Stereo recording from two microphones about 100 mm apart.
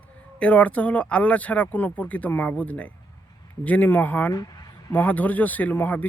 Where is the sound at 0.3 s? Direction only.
15° left (ahead or behind).